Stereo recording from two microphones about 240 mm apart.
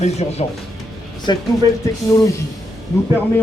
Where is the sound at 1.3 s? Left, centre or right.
Centre.